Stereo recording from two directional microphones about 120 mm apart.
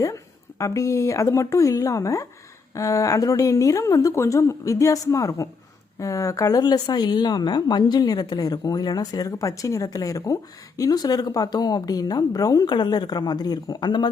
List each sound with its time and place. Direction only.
0.6 s a woman's voice: 25° left (ahead or behind)